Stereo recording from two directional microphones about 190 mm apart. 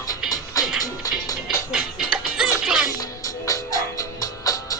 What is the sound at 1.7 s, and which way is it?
Music, 5° right (ahead or behind).